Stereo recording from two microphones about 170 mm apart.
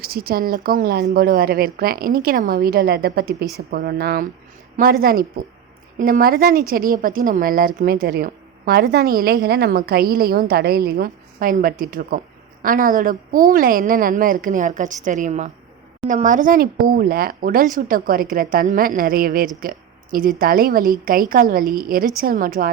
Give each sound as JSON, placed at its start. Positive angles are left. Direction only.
{"t": 0.0, "sound": "a woman's voice", "side_deg": -65}